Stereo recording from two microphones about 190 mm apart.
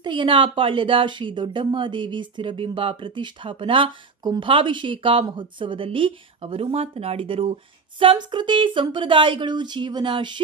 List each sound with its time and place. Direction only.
0.0 s speech: 25° right (ahead or behind)